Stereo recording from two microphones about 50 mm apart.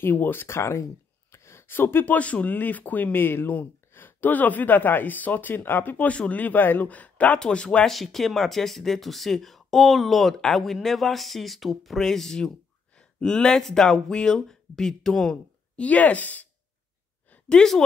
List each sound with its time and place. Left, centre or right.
0.0 s speech: left
0.5 s speech: left
1.3 s a sound: left
2.1 s speech: left
7.3 s speech: centre
7.8 s speech: centre
15.7 s speech: left
17.5 s speech: centre